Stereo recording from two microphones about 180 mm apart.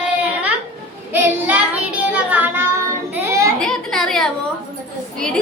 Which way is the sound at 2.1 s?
10° right (ahead or behind).